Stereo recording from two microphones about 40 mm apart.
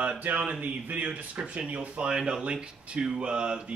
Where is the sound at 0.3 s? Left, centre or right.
Right.